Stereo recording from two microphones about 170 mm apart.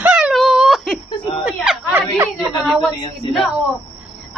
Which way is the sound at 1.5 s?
5° right (ahead or behind).